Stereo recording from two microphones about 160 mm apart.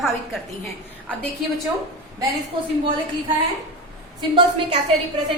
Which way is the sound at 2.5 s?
30° right (ahead or behind).